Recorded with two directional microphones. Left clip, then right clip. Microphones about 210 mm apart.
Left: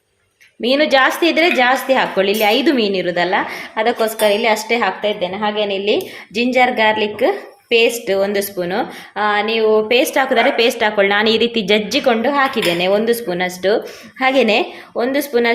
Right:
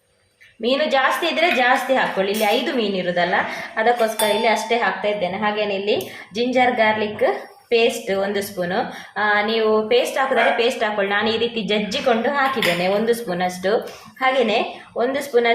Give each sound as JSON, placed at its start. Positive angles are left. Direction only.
{"t": 0.6, "sound": "a woman's voice", "side_deg": 45}